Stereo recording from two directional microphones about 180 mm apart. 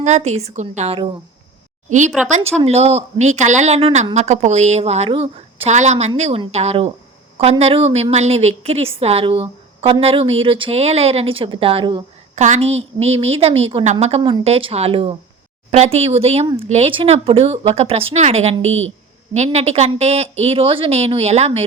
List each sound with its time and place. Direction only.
0.0 s a woman's voice: 40° right (ahead or behind)